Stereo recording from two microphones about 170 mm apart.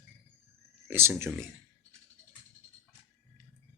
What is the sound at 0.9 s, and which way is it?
Speech, 15° right (ahead or behind).